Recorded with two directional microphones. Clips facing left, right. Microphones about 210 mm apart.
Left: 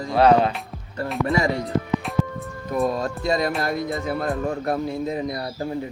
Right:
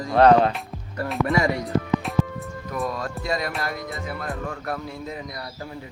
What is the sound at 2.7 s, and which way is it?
Speech, 30° left (ahead or behind).